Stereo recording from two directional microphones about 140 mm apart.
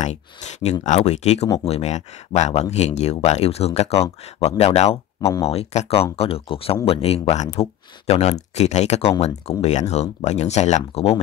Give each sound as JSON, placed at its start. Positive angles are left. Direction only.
{"t": 0.0, "sound": "speech", "side_deg": 55}